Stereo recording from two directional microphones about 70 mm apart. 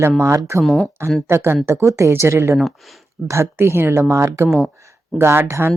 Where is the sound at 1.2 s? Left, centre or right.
Right.